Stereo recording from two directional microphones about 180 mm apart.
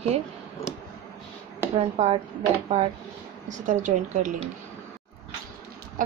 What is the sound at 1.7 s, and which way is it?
Speech, 35° right (ahead or behind).